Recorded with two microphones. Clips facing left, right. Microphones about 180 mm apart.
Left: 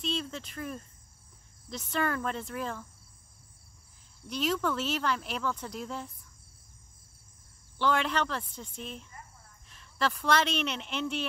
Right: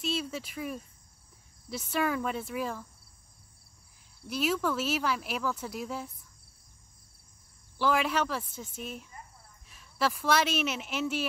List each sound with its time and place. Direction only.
0.0 s speech: 5° right (ahead or behind)
4.3 s speech: 5° right (ahead or behind)
7.8 s speech: 5° right (ahead or behind)